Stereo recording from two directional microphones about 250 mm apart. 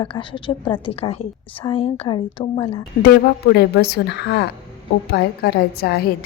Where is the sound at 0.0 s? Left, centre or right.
Centre.